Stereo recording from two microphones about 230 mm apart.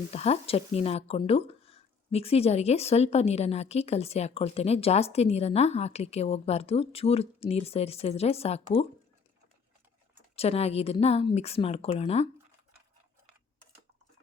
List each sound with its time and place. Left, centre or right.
0.1 s speech: left
10.3 s speech: left